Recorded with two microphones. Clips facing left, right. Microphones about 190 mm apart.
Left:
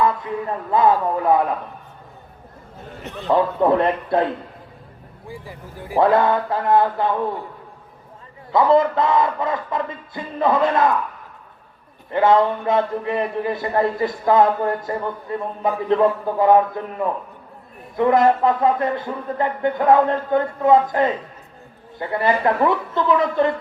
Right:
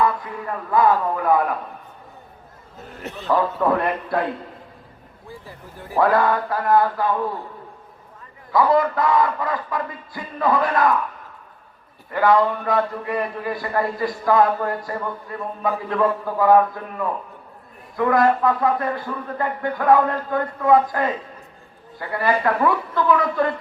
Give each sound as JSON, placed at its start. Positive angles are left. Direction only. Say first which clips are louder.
{"t": 0.4, "sound": "a man's voice", "louder": "even", "side_deg": 25}
{"t": 3.2, "sound": "a man's voice", "louder": "left 3 dB", "side_deg": 25}
{"t": 5.3, "sound": "speech", "louder": "left 3 dB", "side_deg": 15}
{"t": 6.0, "sound": "a man's voice", "louder": "left 2 dB", "side_deg": 25}
{"t": 8.5, "sound": "a man's voice", "louder": "left 2 dB", "side_deg": 25}
{"t": 12.1, "sound": "a man's voice", "louder": "left 2 dB", "side_deg": 25}